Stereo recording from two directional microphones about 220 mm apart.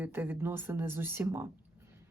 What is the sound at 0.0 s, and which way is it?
A woman's voice, 10° right (ahead or behind).